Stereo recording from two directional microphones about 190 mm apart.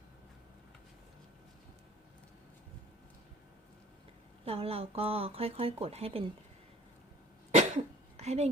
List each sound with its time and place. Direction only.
4.4 s speech: 30° right (ahead or behind)
7.5 s cough: 35° right (ahead or behind)